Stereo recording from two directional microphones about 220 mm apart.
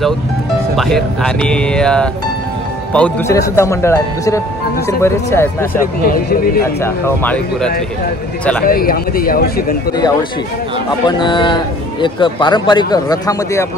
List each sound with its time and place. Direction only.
0.7 s speech: centre (ahead or behind)
6.0 s speech: 40° left (ahead or behind)
6.8 s speech: 10° left (ahead or behind)
8.6 s speech: 40° left (ahead or behind)
10.9 s a man's voice: 20° left (ahead or behind)